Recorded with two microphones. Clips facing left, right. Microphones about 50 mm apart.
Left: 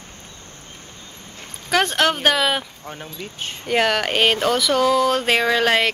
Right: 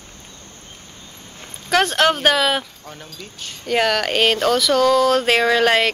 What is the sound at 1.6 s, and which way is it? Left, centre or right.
Speech, centre.